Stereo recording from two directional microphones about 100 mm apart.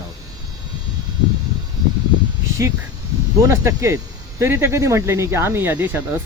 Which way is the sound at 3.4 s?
30° right (ahead or behind).